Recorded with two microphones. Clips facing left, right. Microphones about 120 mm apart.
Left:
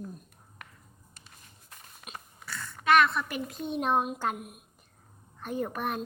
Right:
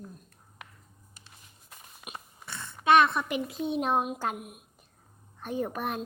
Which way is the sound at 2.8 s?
25° right (ahead or behind).